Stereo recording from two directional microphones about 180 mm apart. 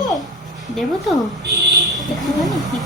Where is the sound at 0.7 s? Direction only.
Centre (ahead or behind).